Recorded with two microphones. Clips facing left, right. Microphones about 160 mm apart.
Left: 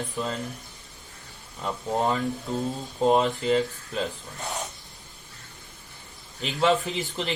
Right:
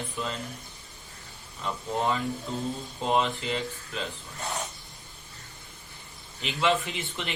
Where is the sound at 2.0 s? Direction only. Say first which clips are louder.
Left 2 dB; 40° left (ahead or behind).